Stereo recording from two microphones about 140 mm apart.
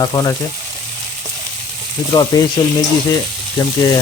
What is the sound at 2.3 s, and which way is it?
Speech, 30° left (ahead or behind).